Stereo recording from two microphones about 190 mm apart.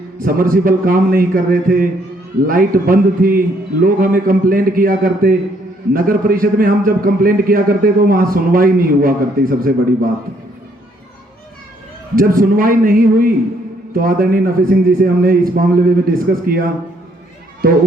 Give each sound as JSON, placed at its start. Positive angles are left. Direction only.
{"t": 0.2, "sound": "a man's voice", "side_deg": -50}
{"t": 12.1, "sound": "a man's voice", "side_deg": -50}